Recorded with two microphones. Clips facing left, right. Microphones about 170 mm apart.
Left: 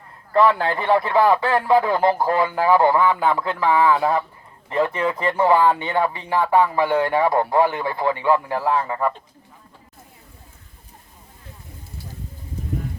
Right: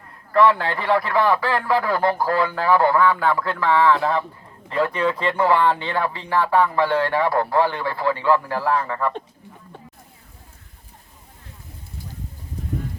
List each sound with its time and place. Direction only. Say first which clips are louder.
0.3 s speech: even; 25° left (ahead or behind)
4.7 s speech: even; 25° left (ahead or behind)